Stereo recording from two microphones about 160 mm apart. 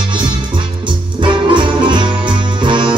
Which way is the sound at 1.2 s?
30° right (ahead or behind).